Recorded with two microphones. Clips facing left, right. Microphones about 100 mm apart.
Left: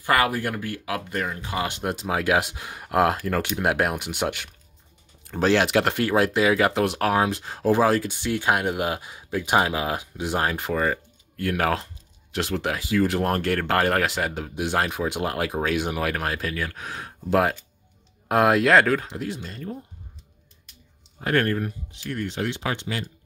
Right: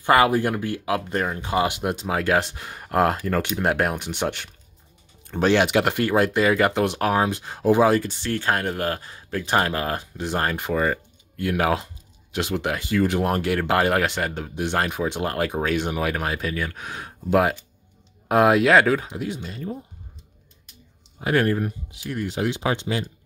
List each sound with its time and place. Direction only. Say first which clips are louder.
0.0 s speech: right 4 dB; 25° right (ahead or behind)
1.7 s speech: right 1 dB; 5° right (ahead or behind)
8.1 s speech: left 1 dB; 10° left (ahead or behind); by 19.8 s 5° right (ahead or behind)
21.2 s speech: right 2 dB; 10° right (ahead or behind)